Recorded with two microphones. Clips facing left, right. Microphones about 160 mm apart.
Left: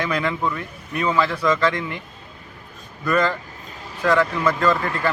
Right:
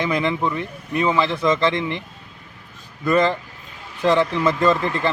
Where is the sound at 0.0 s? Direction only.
20° right (ahead or behind).